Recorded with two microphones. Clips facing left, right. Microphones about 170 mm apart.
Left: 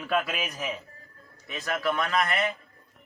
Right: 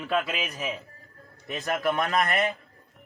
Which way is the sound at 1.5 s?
45° right (ahead or behind).